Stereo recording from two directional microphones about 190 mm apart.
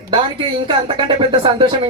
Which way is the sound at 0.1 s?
25° right (ahead or behind).